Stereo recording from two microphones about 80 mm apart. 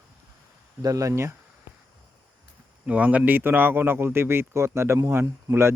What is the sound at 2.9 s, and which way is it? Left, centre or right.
A man's voice, centre.